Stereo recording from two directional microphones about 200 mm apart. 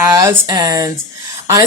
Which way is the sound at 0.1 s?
15° right (ahead or behind).